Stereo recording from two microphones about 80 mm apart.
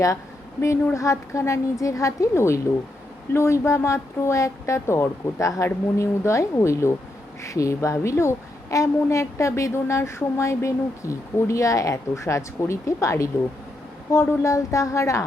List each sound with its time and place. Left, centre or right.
0.9 s a woman's voice: left